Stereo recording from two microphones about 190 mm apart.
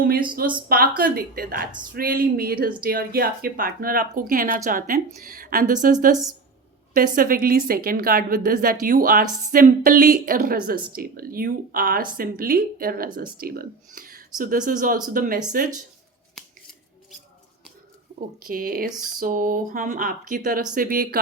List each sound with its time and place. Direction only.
0.0 s a woman's voice: 50° right (ahead or behind)
18.4 s a woman's voice: 50° right (ahead or behind)